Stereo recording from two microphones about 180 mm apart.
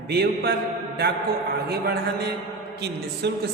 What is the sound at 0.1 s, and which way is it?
Speech, 65° right (ahead or behind).